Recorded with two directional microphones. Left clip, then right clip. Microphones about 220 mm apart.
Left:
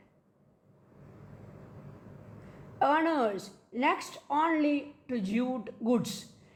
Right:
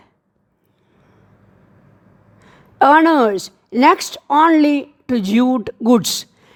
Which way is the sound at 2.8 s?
55° right (ahead or behind).